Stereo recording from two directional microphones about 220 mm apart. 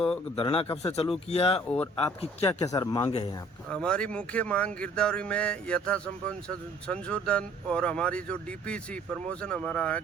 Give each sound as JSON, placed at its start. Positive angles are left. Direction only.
{"t": 0.3, "sound": "speech", "side_deg": 25}
{"t": 1.7, "sound": "speech", "side_deg": 10}
{"t": 3.7, "sound": "speech", "side_deg": 5}